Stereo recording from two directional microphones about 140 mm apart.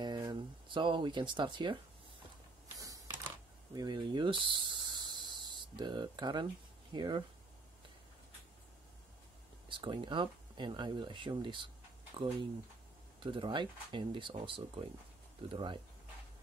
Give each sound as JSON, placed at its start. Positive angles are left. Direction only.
{"t": 0.0, "sound": "speech", "side_deg": -30}
{"t": 3.7, "sound": "speech", "side_deg": -30}
{"t": 9.7, "sound": "speech", "side_deg": -35}